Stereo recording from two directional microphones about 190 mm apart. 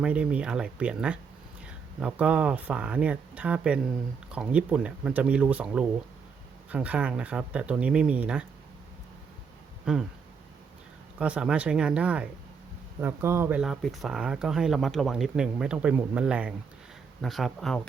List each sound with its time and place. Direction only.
0.0 s speech: 5° right (ahead or behind)
9.8 s speech: 5° right (ahead or behind)
11.2 s speech: 5° right (ahead or behind)